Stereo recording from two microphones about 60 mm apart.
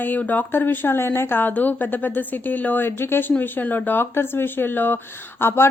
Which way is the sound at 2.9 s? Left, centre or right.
Left.